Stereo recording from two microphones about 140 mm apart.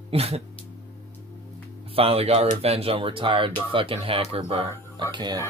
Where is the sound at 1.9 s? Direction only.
45° right (ahead or behind).